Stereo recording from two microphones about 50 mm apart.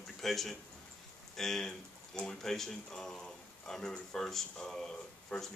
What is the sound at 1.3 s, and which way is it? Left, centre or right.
Speech, centre.